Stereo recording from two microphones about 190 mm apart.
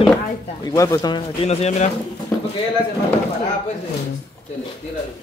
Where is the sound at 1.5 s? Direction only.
35° left (ahead or behind).